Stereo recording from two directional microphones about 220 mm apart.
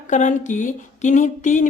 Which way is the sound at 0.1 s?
35° left (ahead or behind).